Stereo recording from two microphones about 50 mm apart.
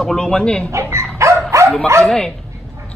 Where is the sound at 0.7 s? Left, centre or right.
Right.